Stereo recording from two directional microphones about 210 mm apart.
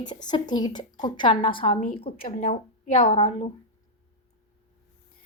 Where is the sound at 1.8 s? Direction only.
40° left (ahead or behind).